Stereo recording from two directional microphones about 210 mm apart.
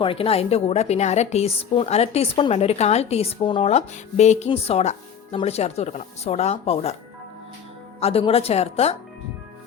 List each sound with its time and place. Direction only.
0.0 s a woman's voice: 25° left (ahead or behind)
7.9 s a woman's voice: 30° left (ahead or behind)